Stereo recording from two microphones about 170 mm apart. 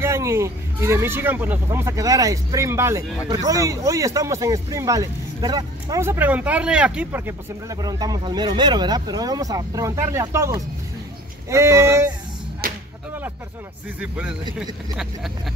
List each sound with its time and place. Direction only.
0.0 s speech: 15° right (ahead or behind)
12.6 s whip: 60° right (ahead or behind)
14.6 s speech: centre (ahead or behind)